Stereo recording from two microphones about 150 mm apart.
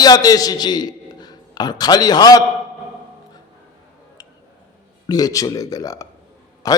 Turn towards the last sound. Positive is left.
turn(degrees=25)  # may be behind; listen again after turning